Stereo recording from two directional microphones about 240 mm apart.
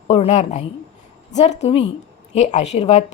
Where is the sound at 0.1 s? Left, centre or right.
Left.